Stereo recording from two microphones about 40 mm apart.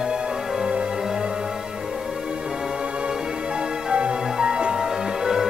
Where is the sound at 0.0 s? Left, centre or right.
Centre.